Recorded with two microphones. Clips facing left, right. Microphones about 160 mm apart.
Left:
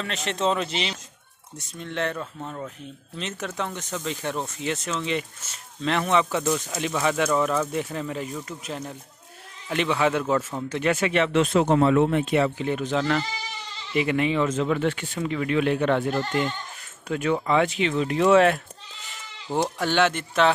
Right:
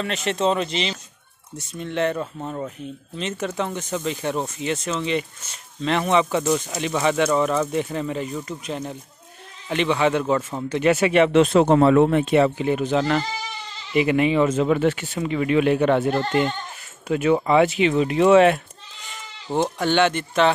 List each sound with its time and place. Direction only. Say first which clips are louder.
0.0 s speech: right 4 dB; centre (ahead or behind)
2.1 s speech: right 5 dB; 15° right (ahead or behind)
3.2 s speech: right 5 dB; centre (ahead or behind); by 11.5 s 20° right (ahead or behind)
11.5 s speech: right 2 dB; 60° right (ahead or behind)
12.5 s speech: right 4 dB; 10° right (ahead or behind)
16.1 s speech: right 4 dB; 65° right (ahead or behind)
17.1 s speech: right 5 dB; 10° right (ahead or behind)